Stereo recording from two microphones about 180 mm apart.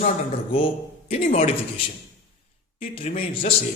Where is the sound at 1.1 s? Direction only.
35° left (ahead or behind).